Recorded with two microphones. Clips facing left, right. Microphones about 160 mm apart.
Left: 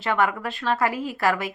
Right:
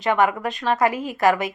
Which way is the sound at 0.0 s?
20° right (ahead or behind).